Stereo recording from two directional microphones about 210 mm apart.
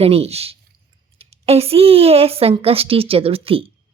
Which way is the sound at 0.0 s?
30° right (ahead or behind).